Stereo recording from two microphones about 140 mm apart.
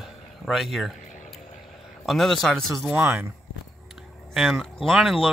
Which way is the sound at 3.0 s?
15° right (ahead or behind).